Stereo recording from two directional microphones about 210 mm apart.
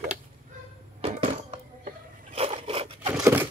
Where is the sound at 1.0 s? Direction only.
25° right (ahead or behind).